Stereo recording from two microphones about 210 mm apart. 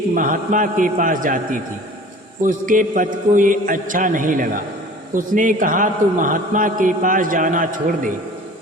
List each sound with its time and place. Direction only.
0.1 s a man's voice: 40° right (ahead or behind)